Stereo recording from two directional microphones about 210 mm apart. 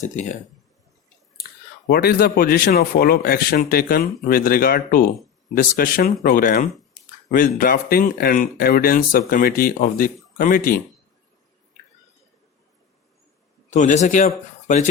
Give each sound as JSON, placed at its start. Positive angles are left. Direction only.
{"t": 0.0, "sound": "speech", "side_deg": 35}
{"t": 1.9, "sound": "speech", "side_deg": 50}
{"t": 13.7, "sound": "speech", "side_deg": 35}